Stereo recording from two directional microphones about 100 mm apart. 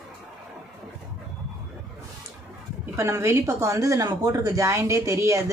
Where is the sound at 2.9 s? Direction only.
30° right (ahead or behind).